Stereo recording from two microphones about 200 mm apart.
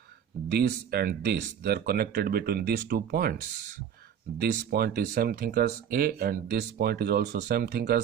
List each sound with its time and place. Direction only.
0.4 s speech: 55° right (ahead or behind)
4.4 s speech: 50° right (ahead or behind)